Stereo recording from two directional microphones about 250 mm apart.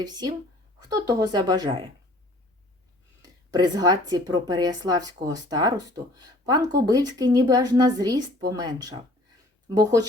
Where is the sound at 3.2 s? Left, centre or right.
Centre.